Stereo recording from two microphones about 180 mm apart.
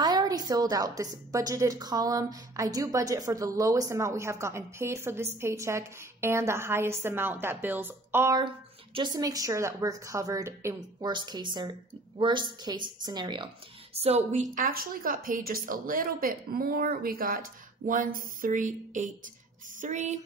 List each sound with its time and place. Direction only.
0.0 s a woman's voice: 20° right (ahead or behind)
8.9 s a woman's voice: 25° right (ahead or behind)
13.9 s a woman's voice: 35° right (ahead or behind)